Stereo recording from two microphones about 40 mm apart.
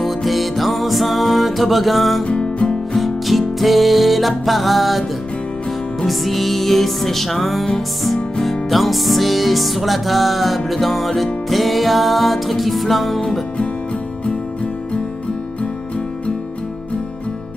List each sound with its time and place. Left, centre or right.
0.0 s music: centre
2.2 s music: left
2.9 s music: centre
6.0 s music: centre